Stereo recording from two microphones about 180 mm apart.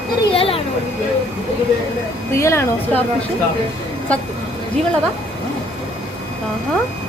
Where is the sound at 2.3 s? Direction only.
15° left (ahead or behind).